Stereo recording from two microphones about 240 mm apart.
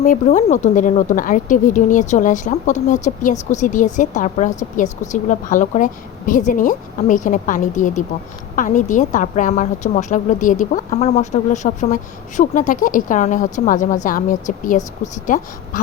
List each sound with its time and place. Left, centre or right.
0.0 s speech: left